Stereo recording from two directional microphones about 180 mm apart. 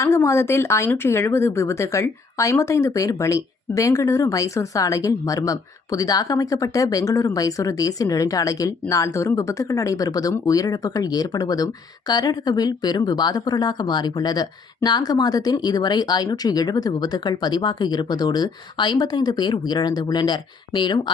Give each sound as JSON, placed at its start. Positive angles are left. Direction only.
{"t": 0.0, "sound": "speech", "side_deg": 15}